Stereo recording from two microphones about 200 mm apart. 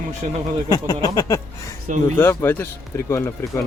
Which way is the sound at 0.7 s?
20° left (ahead or behind).